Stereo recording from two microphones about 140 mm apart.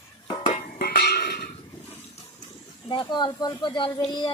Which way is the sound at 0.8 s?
90° left.